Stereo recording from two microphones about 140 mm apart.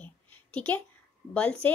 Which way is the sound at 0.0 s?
10° left (ahead or behind).